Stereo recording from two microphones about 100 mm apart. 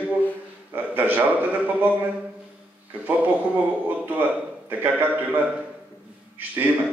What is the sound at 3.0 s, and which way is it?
A man's voice, 15° right (ahead or behind).